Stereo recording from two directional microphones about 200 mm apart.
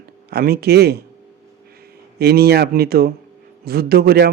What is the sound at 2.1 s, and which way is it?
A man's voice, 50° right (ahead or behind).